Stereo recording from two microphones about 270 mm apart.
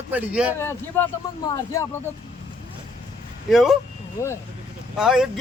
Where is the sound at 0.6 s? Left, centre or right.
Centre.